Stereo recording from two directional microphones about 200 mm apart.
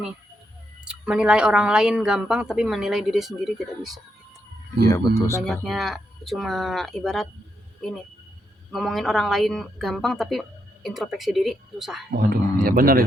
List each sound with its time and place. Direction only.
0.9 s a woman's voice: 5° right (ahead or behind)
4.9 s speech: 15° left (ahead or behind)
5.4 s a woman's voice: centre (ahead or behind)
12.1 s a man's voice: 50° right (ahead or behind)